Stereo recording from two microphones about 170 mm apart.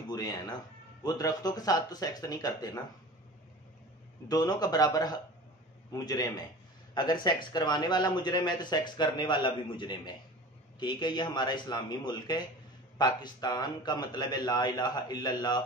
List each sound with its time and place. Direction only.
0.1 s a man's voice: 25° left (ahead or behind)
4.3 s a man's voice: 25° left (ahead or behind)